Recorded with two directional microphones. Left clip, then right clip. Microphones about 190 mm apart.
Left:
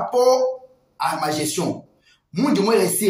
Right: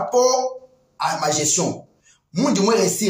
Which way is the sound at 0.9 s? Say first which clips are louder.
Right 1 dB; 15° right (ahead or behind).